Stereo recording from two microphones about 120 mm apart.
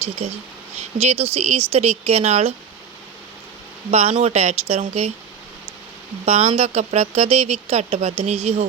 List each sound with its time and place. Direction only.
0.2 s speech: 55° right (ahead or behind)
3.9 s speech: 65° right (ahead or behind)
6.2 s speech: 65° right (ahead or behind)